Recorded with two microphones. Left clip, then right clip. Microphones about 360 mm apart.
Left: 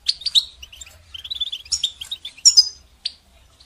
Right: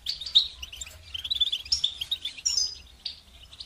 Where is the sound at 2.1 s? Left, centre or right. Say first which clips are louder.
Even; centre.